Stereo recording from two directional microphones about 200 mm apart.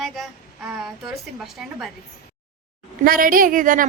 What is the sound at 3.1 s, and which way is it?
Speech, 45° right (ahead or behind).